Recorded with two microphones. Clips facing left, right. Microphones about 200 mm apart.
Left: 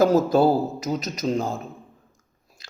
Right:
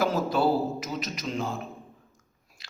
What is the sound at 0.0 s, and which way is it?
Speech, 40° left (ahead or behind).